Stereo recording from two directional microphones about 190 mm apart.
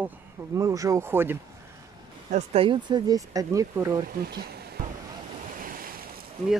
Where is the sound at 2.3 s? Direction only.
30° right (ahead or behind).